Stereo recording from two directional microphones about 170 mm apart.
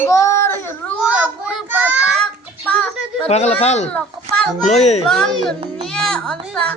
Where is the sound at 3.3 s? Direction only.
40° left (ahead or behind).